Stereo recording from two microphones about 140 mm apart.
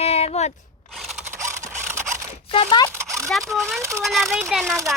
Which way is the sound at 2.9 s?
20° right (ahead or behind).